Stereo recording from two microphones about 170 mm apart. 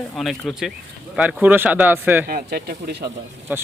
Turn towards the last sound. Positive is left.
turn(degrees=-10)  # may be behind; listen again after turning